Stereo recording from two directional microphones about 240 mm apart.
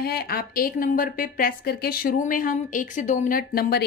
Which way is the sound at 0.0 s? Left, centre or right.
Left.